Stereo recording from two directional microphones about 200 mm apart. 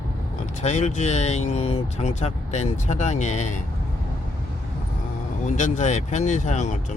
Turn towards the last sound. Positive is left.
turn(degrees=35)  # may be behind; listen again after turning